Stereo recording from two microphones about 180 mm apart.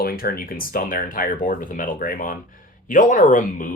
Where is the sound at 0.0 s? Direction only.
55° left (ahead or behind).